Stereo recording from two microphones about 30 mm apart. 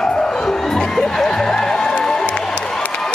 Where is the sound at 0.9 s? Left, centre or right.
Centre.